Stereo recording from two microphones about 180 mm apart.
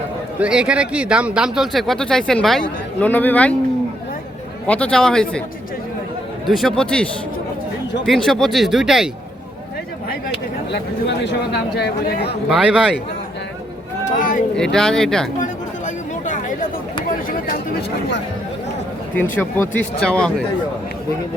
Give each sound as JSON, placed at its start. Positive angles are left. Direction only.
{"t": 0.3, "sound": "a man's voice", "side_deg": -5}
{"t": 4.6, "sound": "a man's voice", "side_deg": 5}
{"t": 6.5, "sound": "a man's voice", "side_deg": 0}
{"t": 11.2, "sound": "speech", "side_deg": 70}
{"t": 12.5, "sound": "a man's voice", "side_deg": -5}
{"t": 14.2, "sound": "speech", "side_deg": 50}
{"t": 14.5, "sound": "a man's voice", "side_deg": 5}
{"t": 16.2, "sound": "chatter", "side_deg": 45}
{"t": 17.1, "sound": "a sound", "side_deg": 50}
{"t": 19.1, "sound": "speech", "side_deg": 10}